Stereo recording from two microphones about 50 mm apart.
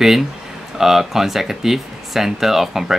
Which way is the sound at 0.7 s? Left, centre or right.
Centre.